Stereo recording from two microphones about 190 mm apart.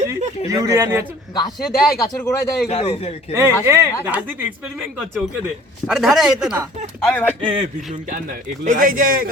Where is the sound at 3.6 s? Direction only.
15° right (ahead or behind).